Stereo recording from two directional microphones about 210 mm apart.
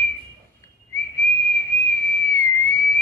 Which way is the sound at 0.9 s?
15° left (ahead or behind).